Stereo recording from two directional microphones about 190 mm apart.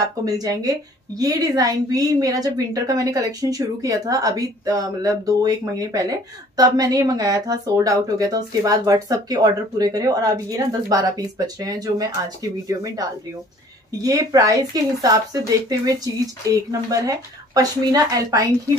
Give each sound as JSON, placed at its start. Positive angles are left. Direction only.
{"t": 0.2, "sound": "a woman's voice", "side_deg": -20}